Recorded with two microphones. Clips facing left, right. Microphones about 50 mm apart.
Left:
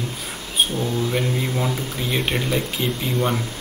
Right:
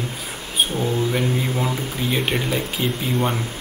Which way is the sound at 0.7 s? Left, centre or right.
Centre.